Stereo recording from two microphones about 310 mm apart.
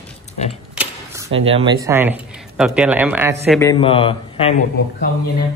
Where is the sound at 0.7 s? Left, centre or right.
Centre.